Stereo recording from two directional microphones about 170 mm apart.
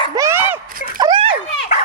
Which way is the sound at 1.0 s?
25° right (ahead or behind).